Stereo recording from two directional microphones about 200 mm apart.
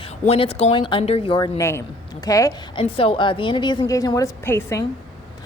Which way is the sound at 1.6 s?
10° left (ahead or behind).